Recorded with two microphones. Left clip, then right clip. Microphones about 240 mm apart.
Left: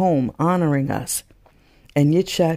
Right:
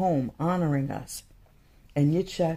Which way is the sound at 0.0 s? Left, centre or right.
Left.